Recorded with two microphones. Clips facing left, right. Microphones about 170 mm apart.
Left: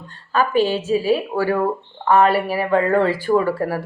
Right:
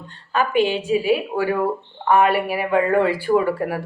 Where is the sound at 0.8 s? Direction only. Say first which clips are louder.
Left 1 dB; 15° right (ahead or behind).